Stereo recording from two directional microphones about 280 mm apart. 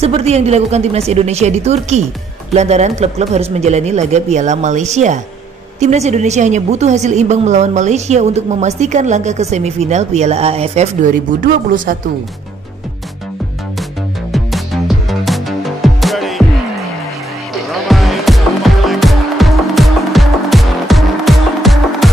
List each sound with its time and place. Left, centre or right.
0.0 s a woman's voice: right
14.3 s music: centre
17.8 s music: centre